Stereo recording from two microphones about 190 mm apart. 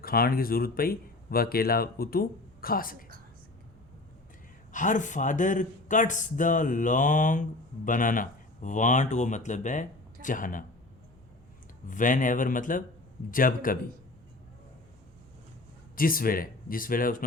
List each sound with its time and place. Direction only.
0.0 s speech: 50° left (ahead or behind)
4.7 s speech: 40° left (ahead or behind)
11.9 s speech: 45° left (ahead or behind)
16.0 s speech: 50° left (ahead or behind)